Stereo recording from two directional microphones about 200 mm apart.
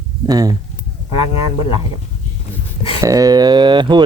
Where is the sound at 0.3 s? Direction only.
20° right (ahead or behind).